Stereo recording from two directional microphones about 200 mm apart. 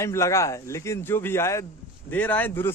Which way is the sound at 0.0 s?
15° left (ahead or behind).